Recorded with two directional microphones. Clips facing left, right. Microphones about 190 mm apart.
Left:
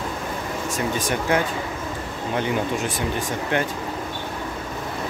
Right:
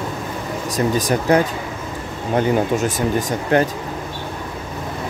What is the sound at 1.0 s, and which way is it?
Speech, 40° right (ahead or behind).